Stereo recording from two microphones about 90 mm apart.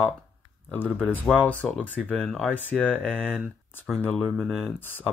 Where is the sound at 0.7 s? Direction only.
20° left (ahead or behind).